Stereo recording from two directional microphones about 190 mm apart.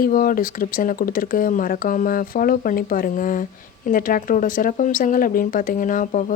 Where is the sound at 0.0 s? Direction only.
50° left (ahead or behind).